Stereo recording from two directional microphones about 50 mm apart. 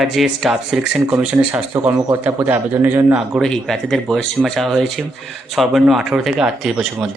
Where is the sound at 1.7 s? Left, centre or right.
Right.